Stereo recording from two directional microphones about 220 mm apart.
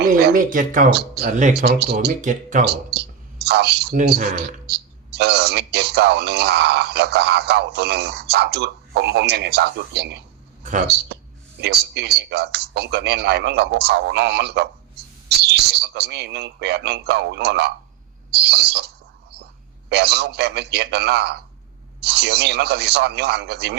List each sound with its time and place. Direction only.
0.1 s speech: 45° right (ahead or behind)
1.3 s speech: 35° right (ahead or behind)
1.6 s speech: 45° right (ahead or behind)
10.6 s speech: 35° right (ahead or behind)
11.6 s speech: 50° right (ahead or behind)
19.9 s speech: 50° right (ahead or behind)